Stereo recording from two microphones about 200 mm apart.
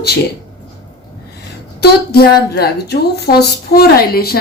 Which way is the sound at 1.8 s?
50° left (ahead or behind).